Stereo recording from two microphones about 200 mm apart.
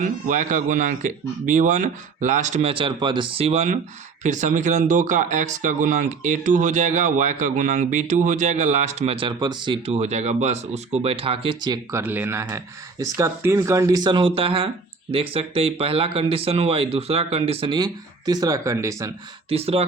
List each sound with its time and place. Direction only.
0.0 s speech: 40° right (ahead or behind); by 19.1 s 15° right (ahead or behind)
19.5 s speech: 30° right (ahead or behind)